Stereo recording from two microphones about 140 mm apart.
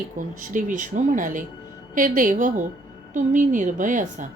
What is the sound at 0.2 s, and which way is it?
A woman's voice, 65° right (ahead or behind).